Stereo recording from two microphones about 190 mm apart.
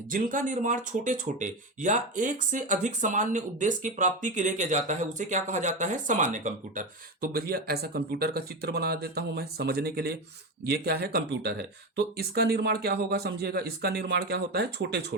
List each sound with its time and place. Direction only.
0.1 s speech: 45° right (ahead or behind); by 15.1 s 60° right (ahead or behind)